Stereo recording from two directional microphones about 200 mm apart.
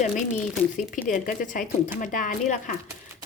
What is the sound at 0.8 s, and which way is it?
Speech, 40° left (ahead or behind).